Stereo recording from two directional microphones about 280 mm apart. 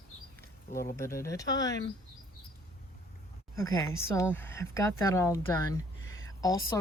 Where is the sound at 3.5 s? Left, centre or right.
Centre.